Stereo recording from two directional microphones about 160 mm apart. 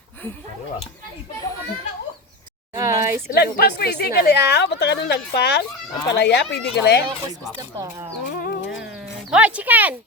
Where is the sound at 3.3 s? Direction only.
90° left.